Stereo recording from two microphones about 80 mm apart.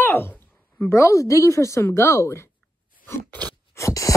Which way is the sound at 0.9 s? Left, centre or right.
Left.